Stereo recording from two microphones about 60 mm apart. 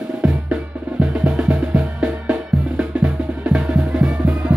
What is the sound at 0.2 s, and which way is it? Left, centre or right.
Music, centre.